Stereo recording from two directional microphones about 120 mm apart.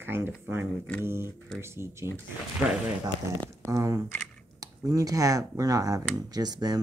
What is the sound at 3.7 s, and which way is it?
Speech, 30° right (ahead or behind).